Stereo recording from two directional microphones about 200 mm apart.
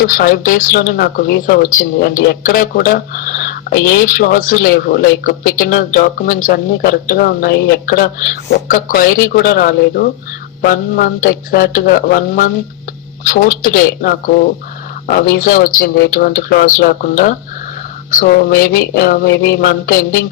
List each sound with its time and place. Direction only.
0.1 s speech: 45° left (ahead or behind)